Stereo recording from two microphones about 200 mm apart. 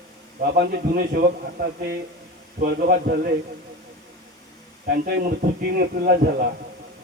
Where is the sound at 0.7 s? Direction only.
45° right (ahead or behind).